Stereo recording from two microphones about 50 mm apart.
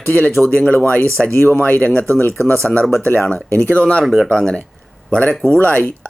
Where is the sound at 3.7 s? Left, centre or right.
Left.